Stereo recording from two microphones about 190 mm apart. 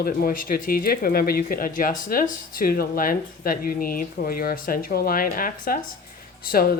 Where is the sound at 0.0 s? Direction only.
50° left (ahead or behind).